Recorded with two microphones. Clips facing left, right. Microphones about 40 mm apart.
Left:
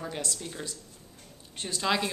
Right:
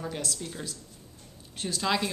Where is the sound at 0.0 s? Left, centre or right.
Centre.